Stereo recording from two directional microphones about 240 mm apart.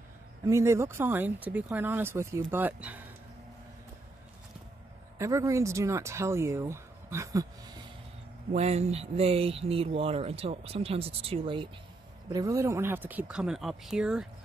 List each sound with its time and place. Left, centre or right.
0.5 s speech: centre
5.2 s speech: centre
8.5 s speech: right; by 14.2 s centre